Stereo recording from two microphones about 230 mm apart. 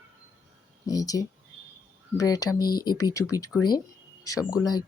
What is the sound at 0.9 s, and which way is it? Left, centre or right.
Speech, centre.